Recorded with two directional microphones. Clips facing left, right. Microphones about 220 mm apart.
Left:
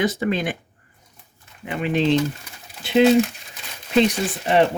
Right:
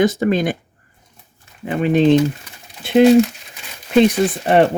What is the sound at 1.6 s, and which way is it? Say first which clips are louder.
Speech: right 7 dB; 40° right (ahead or behind).